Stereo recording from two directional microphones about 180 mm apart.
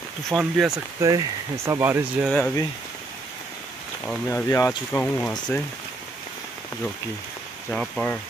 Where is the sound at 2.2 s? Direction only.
5° left (ahead or behind).